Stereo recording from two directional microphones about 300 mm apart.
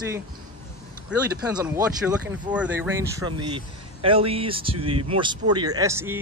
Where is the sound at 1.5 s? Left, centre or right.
Centre.